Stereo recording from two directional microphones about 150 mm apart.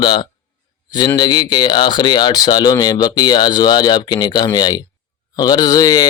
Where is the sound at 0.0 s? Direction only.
30° left (ahead or behind).